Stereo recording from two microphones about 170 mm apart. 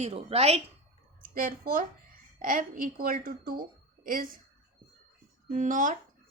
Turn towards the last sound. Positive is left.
turn(degrees=-50)  # may be behind; listen again after turning